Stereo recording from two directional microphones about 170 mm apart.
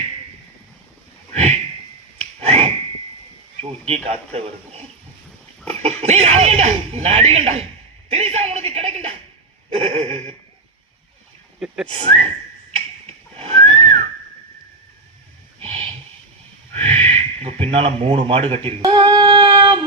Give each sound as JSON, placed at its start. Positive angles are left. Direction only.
{"t": 1.3, "sound": "a sound", "side_deg": -40}
{"t": 3.6, "sound": "speech", "side_deg": -40}
{"t": 11.6, "sound": "a sound", "side_deg": -5}
{"t": 11.9, "sound": "speech", "side_deg": -35}
{"t": 13.3, "sound": "whistling", "side_deg": -35}
{"t": 16.7, "sound": "speech", "side_deg": -40}
{"t": 18.8, "sound": "female singing", "side_deg": -25}